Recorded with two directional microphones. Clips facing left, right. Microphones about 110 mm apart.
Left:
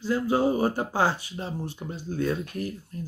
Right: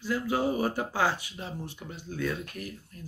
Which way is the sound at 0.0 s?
30° left (ahead or behind).